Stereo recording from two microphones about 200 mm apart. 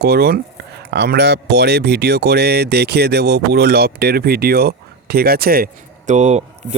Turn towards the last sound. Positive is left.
turn(degrees=-35)  # may be behind; listen again after turning